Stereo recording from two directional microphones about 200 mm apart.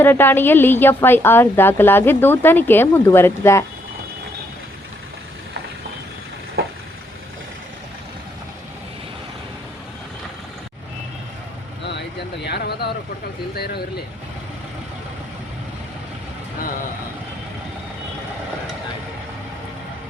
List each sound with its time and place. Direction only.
0.0 s a woman's voice: 10° left (ahead or behind)
11.9 s vehicle: 60° left (ahead or behind)
13.6 s a sound: 50° left (ahead or behind)